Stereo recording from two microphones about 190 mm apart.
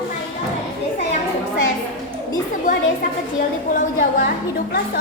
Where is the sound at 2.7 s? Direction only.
40° left (ahead or behind).